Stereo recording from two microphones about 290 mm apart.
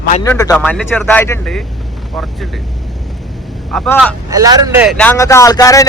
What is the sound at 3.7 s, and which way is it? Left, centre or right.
Speech, centre.